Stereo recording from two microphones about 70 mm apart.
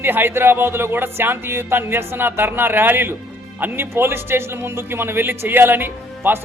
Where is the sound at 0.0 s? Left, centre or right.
Right.